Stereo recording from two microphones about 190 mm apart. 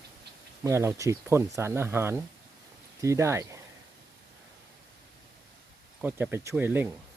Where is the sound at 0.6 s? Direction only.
15° right (ahead or behind).